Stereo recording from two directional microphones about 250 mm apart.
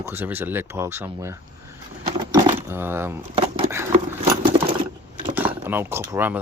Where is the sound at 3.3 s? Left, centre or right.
Right.